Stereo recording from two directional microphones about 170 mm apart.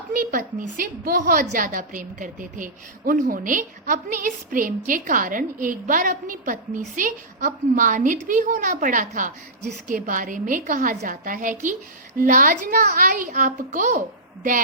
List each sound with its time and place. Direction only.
0.1 s a woman's voice: 55° right (ahead or behind)